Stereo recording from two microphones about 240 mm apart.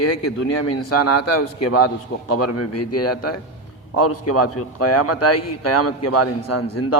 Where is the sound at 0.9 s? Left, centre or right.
Left.